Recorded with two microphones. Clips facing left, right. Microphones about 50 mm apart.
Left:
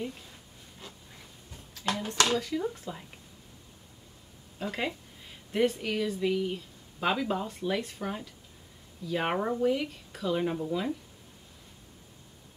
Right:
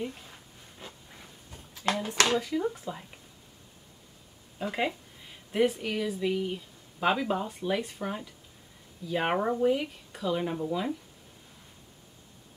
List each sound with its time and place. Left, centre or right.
0.3 s a sound: centre
2.3 s speech: centre
4.6 s speech: centre